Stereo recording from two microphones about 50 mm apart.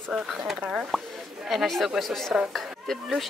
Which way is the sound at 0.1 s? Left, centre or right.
Centre.